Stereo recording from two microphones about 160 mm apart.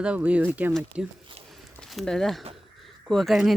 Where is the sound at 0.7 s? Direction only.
Centre (ahead or behind).